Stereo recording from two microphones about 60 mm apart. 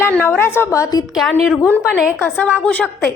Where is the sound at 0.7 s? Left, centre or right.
Left.